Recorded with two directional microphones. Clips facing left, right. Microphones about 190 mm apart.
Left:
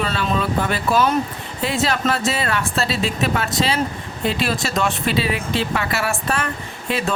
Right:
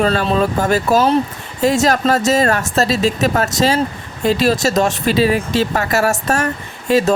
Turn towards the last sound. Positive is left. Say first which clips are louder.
# right 9 dB
turn(degrees=-40)  # may be behind; listen again after turning